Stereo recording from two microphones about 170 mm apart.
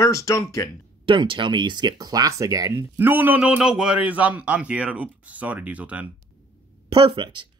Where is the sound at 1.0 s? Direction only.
30° right (ahead or behind); by 6.0 s 10° right (ahead or behind).